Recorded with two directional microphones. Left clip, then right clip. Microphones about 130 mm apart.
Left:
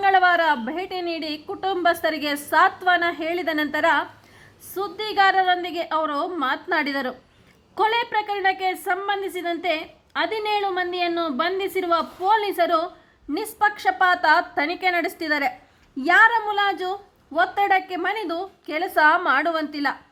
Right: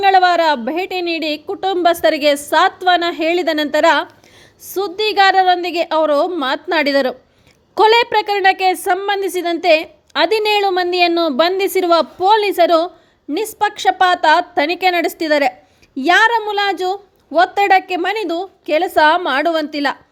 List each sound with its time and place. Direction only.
0.0 s a woman's voice: 30° right (ahead or behind)